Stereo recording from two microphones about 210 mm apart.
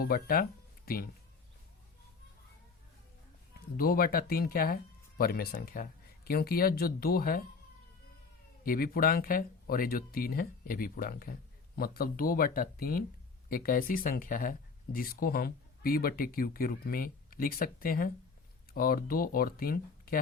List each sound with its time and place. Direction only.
0.0 s speech: 45° left (ahead or behind)
3.8 s speech: 45° left (ahead or behind)
8.6 s speech: 45° left (ahead or behind)